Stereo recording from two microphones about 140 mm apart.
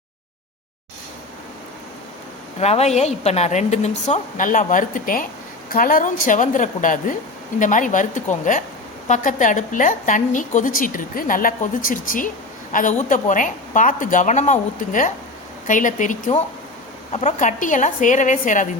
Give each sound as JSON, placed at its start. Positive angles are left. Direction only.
{"t": 2.6, "sound": "a woman's voice", "side_deg": 50}
{"t": 17.1, "sound": "a woman's voice", "side_deg": 55}